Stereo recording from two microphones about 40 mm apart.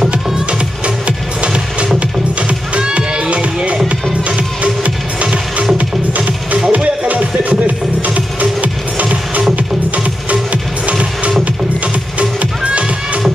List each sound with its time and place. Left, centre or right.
0.1 s music: right
3.0 s music: right
4.8 s music: right
10.5 s music: right